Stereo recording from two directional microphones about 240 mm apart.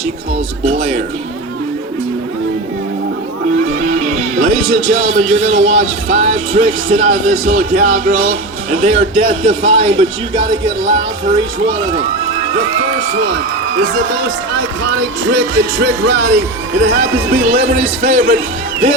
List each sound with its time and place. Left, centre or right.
0.6 s speech: right
3.8 s speech: right
8.8 s speech: right
13.9 s speech: right